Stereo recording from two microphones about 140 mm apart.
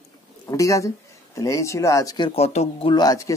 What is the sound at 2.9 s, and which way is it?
Speech, 25° left (ahead or behind).